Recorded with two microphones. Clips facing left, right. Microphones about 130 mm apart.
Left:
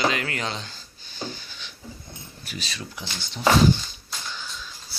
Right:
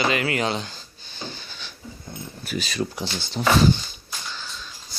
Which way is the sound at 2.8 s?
55° right (ahead or behind).